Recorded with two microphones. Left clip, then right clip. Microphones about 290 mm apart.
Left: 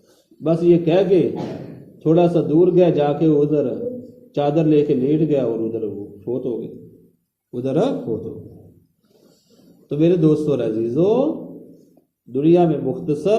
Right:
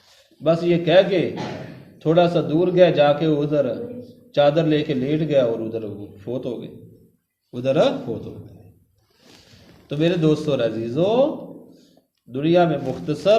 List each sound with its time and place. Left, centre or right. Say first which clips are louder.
0.4 s a man's voice: left 2 dB; right
9.9 s a man's voice: left 3 dB; right
12.3 s a man's voice: left 2 dB; right